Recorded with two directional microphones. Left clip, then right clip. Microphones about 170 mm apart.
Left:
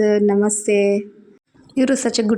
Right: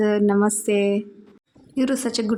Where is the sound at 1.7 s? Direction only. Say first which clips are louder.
Left 5 dB; 20° left (ahead or behind).